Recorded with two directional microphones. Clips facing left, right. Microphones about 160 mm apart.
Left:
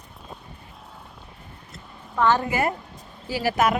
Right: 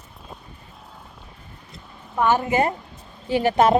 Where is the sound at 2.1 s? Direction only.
15° right (ahead or behind).